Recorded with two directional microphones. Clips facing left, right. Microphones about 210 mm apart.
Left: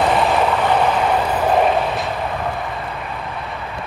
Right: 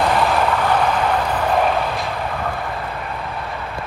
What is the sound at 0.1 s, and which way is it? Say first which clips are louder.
Vehicle: left 1 dB; centre (ahead or behind).